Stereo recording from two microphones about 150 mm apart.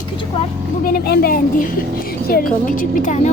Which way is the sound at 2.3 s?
70° left (ahead or behind).